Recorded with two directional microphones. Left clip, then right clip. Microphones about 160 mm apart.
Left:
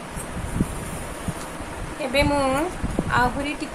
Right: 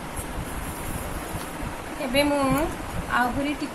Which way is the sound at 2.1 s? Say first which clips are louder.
Left 1 dB; 40° left (ahead or behind).